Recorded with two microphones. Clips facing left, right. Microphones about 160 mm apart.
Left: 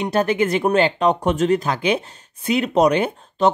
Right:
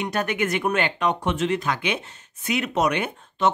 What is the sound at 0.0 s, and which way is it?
Speech, 30° left (ahead or behind).